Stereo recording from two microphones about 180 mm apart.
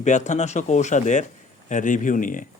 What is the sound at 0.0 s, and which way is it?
Speech, 40° left (ahead or behind).